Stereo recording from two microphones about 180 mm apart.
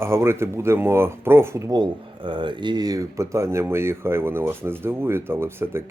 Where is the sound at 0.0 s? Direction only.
15° right (ahead or behind).